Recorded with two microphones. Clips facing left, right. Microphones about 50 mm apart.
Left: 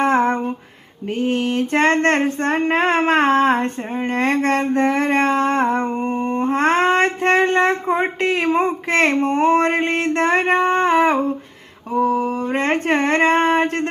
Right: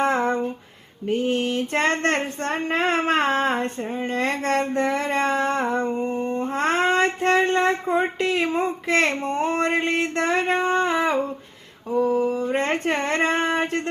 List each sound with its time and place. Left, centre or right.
0.0 s female singing: left